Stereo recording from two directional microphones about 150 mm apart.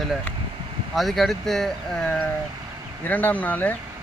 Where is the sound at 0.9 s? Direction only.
Centre (ahead or behind).